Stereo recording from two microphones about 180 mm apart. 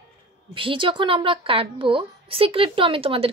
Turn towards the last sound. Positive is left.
turn(degrees=-30)  # may be behind; listen again after turning